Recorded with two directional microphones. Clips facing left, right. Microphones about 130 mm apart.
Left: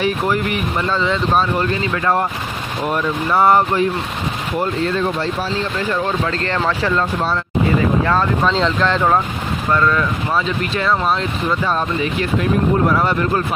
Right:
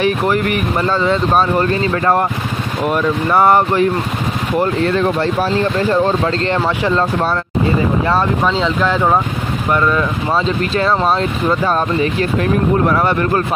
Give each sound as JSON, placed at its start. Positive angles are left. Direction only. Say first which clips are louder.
{"t": 0.8, "sound": "speech", "louder": "right 3 dB", "side_deg": -45}
{"t": 3.3, "sound": "speech", "louder": "right 1 dB", "side_deg": -55}
{"t": 5.8, "sound": "speech", "louder": "right 5 dB", "side_deg": -35}
{"t": 6.4, "sound": "speech", "louder": "right 3 dB", "side_deg": -20}
{"t": 8.1, "sound": "speech", "louder": "right 1 dB", "side_deg": -5}
{"t": 10.8, "sound": "speech", "louder": "right 3 dB", "side_deg": -35}